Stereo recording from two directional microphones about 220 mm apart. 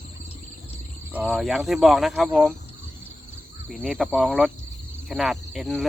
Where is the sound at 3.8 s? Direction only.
Centre (ahead or behind).